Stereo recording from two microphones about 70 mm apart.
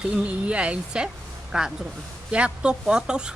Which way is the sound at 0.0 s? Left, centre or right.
Centre.